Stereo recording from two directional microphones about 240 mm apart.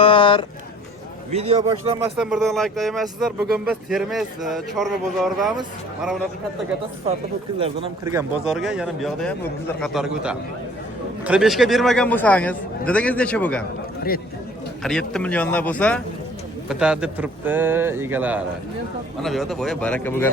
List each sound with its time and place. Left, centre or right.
0.0 s a sound: left
1.3 s speech: right
2.1 s speech: centre
7.6 s speech: centre
8.4 s speech: centre
14.8 s speech: centre